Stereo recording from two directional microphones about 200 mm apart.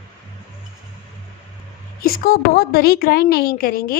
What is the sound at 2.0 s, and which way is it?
Speech, 45° left (ahead or behind).